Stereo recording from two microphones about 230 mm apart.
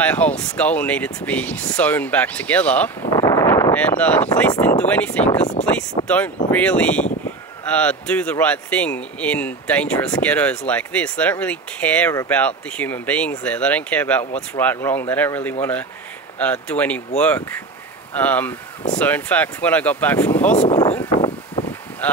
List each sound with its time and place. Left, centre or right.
0.0 s speech: centre
3.1 s speech: centre
5.3 s speech: left
6.0 s speech: centre
20.7 s a sound: centre
22.0 s speech: centre